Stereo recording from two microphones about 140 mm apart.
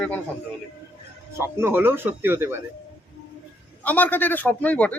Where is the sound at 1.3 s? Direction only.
20° right (ahead or behind).